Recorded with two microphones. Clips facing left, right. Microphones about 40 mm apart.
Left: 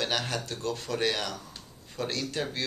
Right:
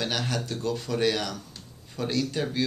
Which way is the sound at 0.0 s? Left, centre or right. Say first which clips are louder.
Right 1 dB; centre.